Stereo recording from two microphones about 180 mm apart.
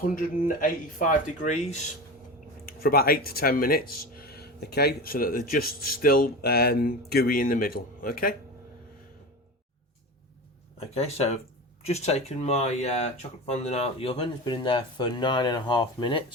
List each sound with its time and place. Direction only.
0.0 s speech: 50° left (ahead or behind)
2.6 s speech: 55° left (ahead or behind)
10.8 s speech: 35° left (ahead or behind)